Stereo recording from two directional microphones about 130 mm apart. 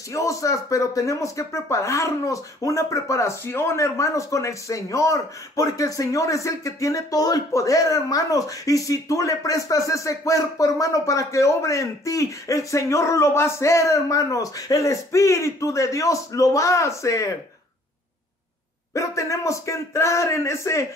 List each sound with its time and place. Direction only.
0.1 s speech: 25° left (ahead or behind)
18.9 s speech: 25° left (ahead or behind)